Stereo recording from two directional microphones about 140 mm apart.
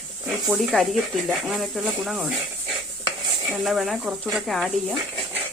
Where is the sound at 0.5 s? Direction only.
5° right (ahead or behind).